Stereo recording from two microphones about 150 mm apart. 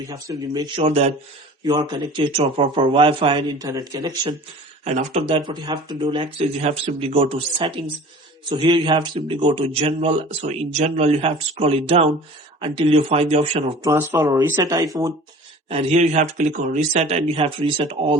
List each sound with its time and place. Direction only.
0.1 s speech: 25° right (ahead or behind)
0.8 s speech: 45° right (ahead or behind)
1.6 s a man's voice: 25° right (ahead or behind)
3.7 s speech: 25° right (ahead or behind)
4.9 s a man's voice: 45° right (ahead or behind)
13.8 s speech: 15° right (ahead or behind)
15.7 s speech: 50° right (ahead or behind)